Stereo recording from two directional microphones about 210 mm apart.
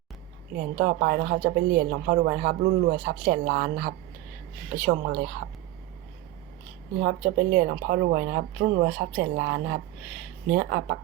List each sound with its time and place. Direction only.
0.5 s a woman's voice: 45° right (ahead or behind)
7.0 s a woman's voice: 45° right (ahead or behind)